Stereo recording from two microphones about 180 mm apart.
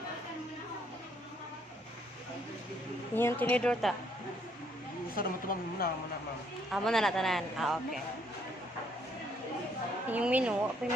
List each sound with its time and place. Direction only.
3.2 s a woman's voice: 10° left (ahead or behind)
5.1 s speech: 50° left (ahead or behind)
6.7 s speech: centre (ahead or behind)
10.1 s a woman's voice: 10° right (ahead or behind)